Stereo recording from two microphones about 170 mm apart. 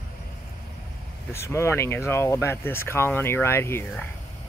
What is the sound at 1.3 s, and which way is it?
Speech, 15° left (ahead or behind).